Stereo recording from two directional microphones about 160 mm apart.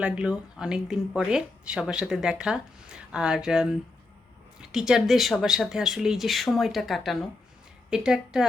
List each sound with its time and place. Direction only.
0.0 s speech: 5° right (ahead or behind)
4.7 s speech: 5° right (ahead or behind)